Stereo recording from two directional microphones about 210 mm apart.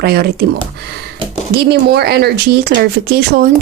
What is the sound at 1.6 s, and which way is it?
Speech, 50° right (ahead or behind).